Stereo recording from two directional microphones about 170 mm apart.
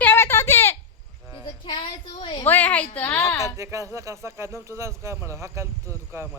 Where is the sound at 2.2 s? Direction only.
25° left (ahead or behind).